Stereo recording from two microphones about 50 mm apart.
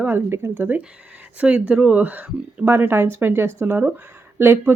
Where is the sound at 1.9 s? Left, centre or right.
Right.